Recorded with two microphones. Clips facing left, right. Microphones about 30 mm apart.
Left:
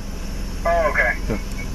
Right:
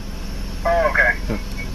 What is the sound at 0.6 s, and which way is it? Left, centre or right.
Telephone, right.